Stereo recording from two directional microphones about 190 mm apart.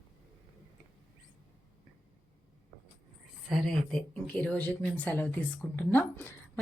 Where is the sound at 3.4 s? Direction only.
Centre (ahead or behind).